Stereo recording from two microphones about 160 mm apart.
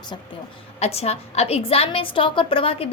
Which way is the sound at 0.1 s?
30° left (ahead or behind).